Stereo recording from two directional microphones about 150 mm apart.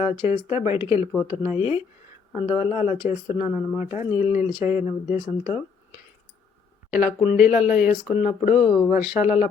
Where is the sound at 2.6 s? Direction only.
45° left (ahead or behind).